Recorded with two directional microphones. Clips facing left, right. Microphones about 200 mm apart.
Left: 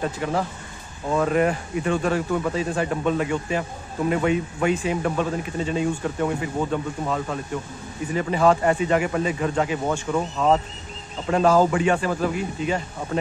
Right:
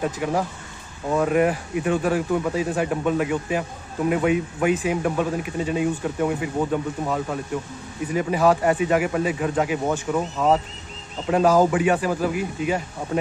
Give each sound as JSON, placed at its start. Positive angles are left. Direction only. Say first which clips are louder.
{"t": 0.0, "sound": "speech", "louder": "right 1 dB", "side_deg": -10}